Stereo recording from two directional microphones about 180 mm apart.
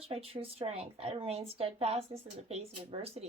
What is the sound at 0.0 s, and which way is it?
Speech, 35° right (ahead or behind).